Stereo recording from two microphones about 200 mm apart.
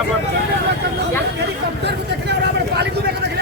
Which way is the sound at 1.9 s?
55° right (ahead or behind).